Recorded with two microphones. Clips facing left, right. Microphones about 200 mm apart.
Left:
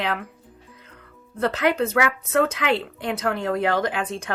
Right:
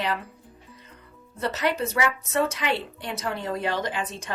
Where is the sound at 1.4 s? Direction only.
55° left (ahead or behind).